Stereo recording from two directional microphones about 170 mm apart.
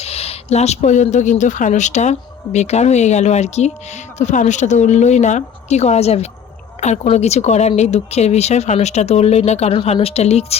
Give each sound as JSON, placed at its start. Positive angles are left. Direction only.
{"t": 0.0, "sound": "a woman's voice", "side_deg": 35}